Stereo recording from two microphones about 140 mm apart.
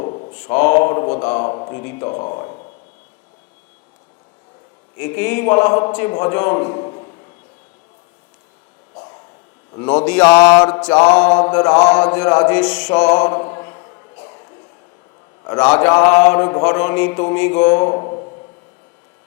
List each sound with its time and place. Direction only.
0.3 s mantra: 15° left (ahead or behind)
1.5 s speech: 25° left (ahead or behind)
1.8 s mantra: 15° left (ahead or behind)
4.9 s mantra: 15° left (ahead or behind)
5.9 s a man's voice: 15° left (ahead or behind)
9.7 s mantra: 15° left (ahead or behind)
15.6 s mantra: 10° left (ahead or behind); by 18.3 s 30° left (ahead or behind)